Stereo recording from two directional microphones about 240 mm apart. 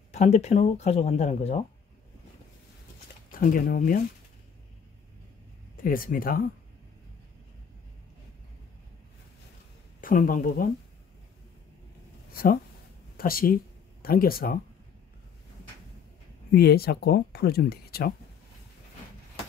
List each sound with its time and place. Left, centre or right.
0.1 s speech: left
3.3 s speech: left
5.9 s speech: left
9.9 s speech: left
12.3 s a sound: left
13.2 s speech: left
16.5 s speech: left